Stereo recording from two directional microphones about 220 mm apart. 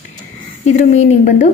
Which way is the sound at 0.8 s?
30° left (ahead or behind).